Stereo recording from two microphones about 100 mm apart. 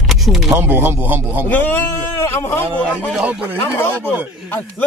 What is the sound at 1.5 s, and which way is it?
Speech, 20° left (ahead or behind).